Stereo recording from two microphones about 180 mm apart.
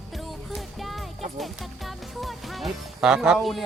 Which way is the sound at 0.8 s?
Centre (ahead or behind).